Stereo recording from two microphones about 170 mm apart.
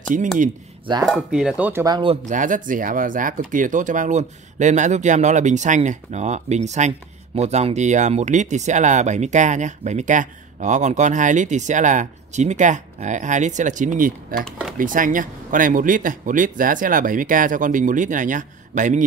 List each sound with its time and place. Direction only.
1.0 s speech: centre (ahead or behind)
1.9 s speech: 30° right (ahead or behind)
2.2 s speech: 50° right (ahead or behind)